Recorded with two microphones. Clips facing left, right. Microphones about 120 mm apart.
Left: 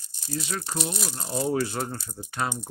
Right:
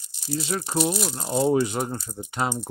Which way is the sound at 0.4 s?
30° right (ahead or behind).